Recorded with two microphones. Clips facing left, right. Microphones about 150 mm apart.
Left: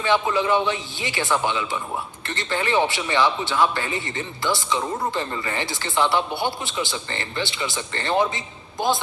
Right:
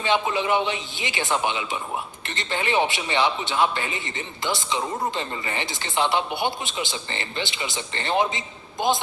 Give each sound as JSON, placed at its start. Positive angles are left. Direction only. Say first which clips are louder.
{"t": 0.0, "sound": "a man's voice", "louder": "left 2 dB", "side_deg": -20}